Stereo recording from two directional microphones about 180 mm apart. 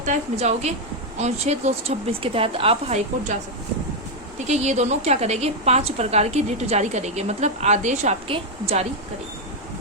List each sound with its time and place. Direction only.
0.0 s a woman's voice: 40° right (ahead or behind)
4.4 s a woman's voice: 40° right (ahead or behind)